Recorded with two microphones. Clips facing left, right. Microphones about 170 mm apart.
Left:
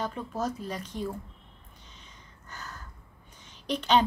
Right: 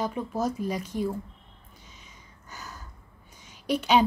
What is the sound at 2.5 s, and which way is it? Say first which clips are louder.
Gasp: right 1 dB; 10° right (ahead or behind).